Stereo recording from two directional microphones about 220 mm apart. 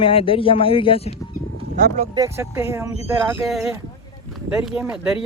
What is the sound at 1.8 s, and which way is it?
Speech, 35° right (ahead or behind).